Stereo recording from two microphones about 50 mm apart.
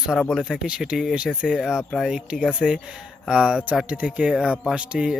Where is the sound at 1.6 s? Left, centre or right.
Centre.